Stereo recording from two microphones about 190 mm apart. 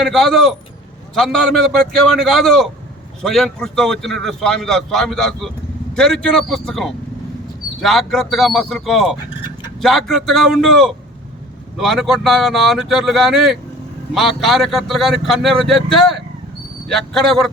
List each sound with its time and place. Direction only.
0.0 s a man's voice: centre (ahead or behind)